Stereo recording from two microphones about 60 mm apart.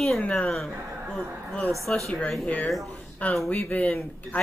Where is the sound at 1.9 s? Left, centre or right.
Left.